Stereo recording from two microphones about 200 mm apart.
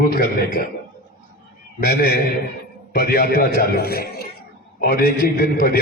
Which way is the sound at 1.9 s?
50° left (ahead or behind).